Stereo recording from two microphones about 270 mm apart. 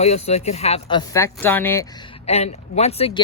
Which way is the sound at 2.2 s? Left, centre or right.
Left.